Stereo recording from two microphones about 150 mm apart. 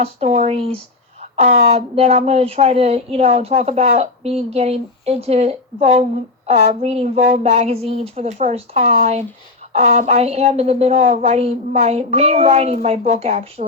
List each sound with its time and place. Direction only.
0.0 s speech: 45° right (ahead or behind)